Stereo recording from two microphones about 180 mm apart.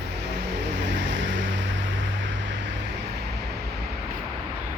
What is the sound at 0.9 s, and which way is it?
Vehicle, 90° right.